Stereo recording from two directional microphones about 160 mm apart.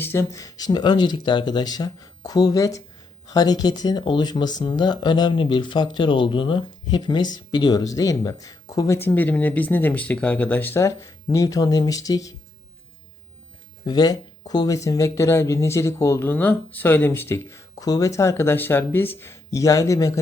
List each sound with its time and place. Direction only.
0.0 s speech: 15° left (ahead or behind)
13.8 s speech: 25° left (ahead or behind)